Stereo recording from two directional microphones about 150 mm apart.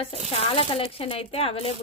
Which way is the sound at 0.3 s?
40° left (ahead or behind).